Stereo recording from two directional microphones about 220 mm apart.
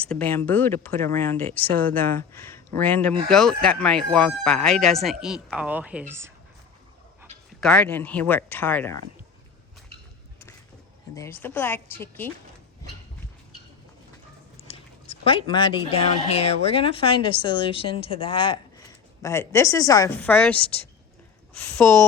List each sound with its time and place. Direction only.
0.0 s speech: 5° left (ahead or behind); by 6.3 s 10° right (ahead or behind)
7.6 s speech: 5° left (ahead or behind)
11.1 s speech: 10° left (ahead or behind)
14.7 s speech: 25° left (ahead or behind); by 22.0 s 10° left (ahead or behind)